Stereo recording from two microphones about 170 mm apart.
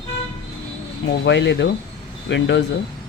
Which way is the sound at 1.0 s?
90° left.